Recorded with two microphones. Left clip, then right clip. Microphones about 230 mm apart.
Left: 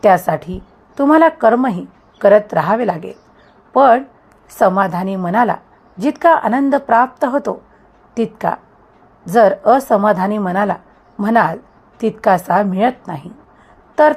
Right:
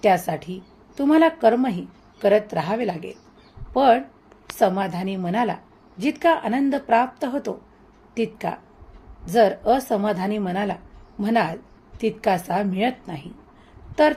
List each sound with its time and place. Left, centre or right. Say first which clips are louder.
0.0 s a woman's voice: left 8 dB; left